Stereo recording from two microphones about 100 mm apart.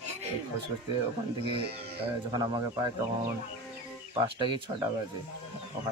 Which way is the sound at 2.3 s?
45° right (ahead or behind).